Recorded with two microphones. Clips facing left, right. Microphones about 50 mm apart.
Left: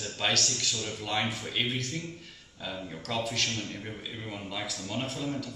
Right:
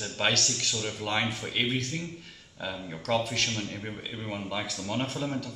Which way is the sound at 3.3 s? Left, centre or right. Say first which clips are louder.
Right 2 dB; centre.